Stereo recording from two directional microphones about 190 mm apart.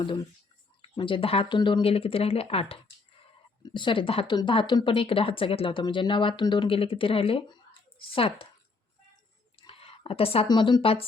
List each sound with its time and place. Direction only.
0.8 s speech: 25° left (ahead or behind)
9.6 s speech: 30° left (ahead or behind)